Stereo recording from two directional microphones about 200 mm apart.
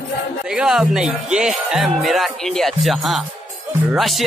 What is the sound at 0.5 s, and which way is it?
Speech, 5° right (ahead or behind).